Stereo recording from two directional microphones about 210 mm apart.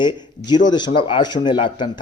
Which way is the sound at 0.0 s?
20° left (ahead or behind).